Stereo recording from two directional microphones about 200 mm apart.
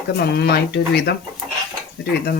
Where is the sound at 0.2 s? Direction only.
55° left (ahead or behind).